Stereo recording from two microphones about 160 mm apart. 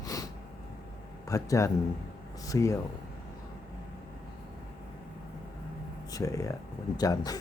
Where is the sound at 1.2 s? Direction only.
20° left (ahead or behind).